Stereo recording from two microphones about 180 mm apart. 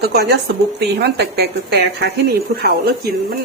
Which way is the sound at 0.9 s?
65° right (ahead or behind).